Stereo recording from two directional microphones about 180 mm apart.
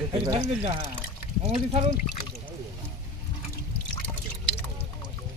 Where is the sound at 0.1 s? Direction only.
30° right (ahead or behind).